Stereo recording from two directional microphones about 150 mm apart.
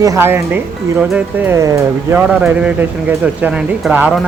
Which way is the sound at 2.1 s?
5° right (ahead or behind).